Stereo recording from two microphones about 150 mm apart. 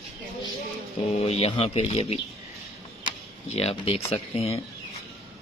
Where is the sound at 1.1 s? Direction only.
45° left (ahead or behind).